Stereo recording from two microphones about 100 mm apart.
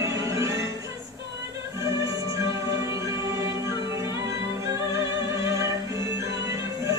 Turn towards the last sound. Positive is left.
turn(degrees=-30)  # may be behind; listen again after turning